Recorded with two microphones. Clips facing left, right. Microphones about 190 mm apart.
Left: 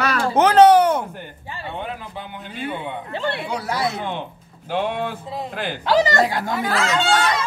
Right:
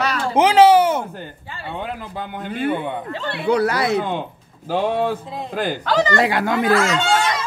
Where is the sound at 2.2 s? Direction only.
55° right (ahead or behind).